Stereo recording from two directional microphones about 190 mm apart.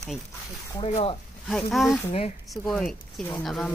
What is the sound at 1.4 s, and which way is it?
Speech, centre (ahead or behind).